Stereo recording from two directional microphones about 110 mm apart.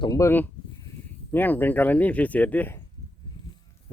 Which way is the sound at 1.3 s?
20° left (ahead or behind).